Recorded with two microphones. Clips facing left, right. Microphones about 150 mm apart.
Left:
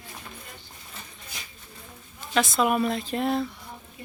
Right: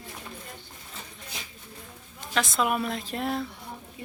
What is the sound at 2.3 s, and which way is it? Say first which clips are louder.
Speech: left 3 dB; centre (ahead or behind).